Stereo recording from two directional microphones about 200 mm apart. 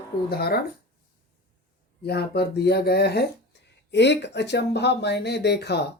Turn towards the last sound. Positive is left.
turn(degrees=55)  # may be behind; listen again after turning